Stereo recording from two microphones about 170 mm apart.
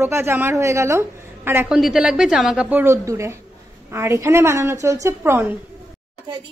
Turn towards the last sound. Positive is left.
turn(degrees=-15)  # may be behind; listen again after turning